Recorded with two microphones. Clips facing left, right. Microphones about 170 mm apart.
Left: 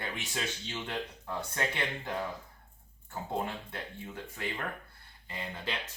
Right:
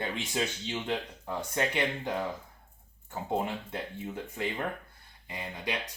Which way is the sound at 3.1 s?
20° right (ahead or behind).